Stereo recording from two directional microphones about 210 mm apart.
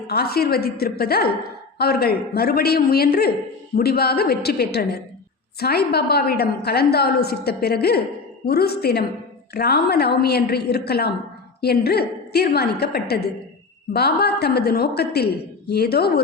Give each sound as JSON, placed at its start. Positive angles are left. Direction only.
{"t": 0.1, "sound": "a woman's voice", "side_deg": 50}